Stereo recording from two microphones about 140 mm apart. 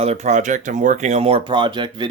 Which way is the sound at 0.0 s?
50° right (ahead or behind).